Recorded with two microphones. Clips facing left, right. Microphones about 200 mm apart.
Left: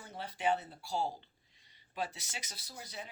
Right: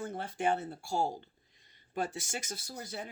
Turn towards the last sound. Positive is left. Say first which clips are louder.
# right 6 dB
turn(degrees=-50)  # may be behind; listen again after turning